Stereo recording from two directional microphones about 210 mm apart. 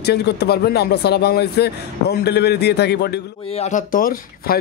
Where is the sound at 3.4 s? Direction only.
30° left (ahead or behind).